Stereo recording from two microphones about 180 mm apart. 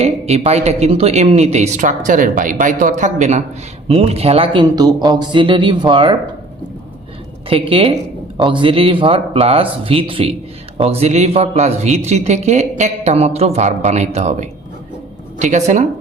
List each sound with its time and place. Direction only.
0.0 s speech: 35° right (ahead or behind)
7.5 s speech: 30° right (ahead or behind)